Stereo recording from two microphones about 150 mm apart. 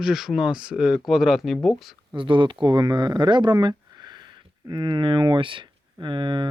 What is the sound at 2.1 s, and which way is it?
Speech, 35° right (ahead or behind).